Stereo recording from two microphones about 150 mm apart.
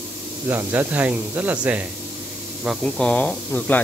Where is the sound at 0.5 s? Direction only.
10° right (ahead or behind).